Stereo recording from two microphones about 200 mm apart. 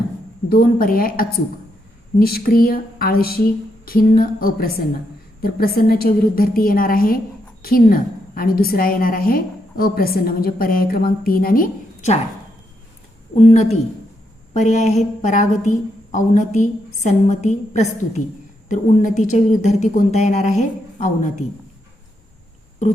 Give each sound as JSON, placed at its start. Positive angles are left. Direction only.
{"t": 0.5, "sound": "a woman's voice", "side_deg": 45}
{"t": 13.3, "sound": "speech", "side_deg": 35}